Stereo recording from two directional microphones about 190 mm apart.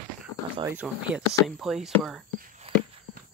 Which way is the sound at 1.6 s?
Centre (ahead or behind).